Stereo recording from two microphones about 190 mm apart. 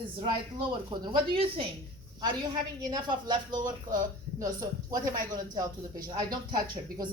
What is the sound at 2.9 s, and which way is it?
Speech, 25° right (ahead or behind).